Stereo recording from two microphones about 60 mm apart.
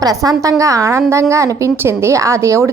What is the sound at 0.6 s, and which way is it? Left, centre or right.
A woman's voice, right.